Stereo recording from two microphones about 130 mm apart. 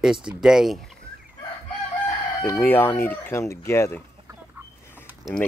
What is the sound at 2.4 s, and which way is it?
Speech, 15° left (ahead or behind).